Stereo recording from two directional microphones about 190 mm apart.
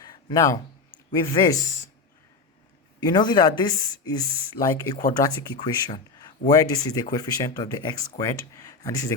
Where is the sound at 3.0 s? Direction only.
20° left (ahead or behind).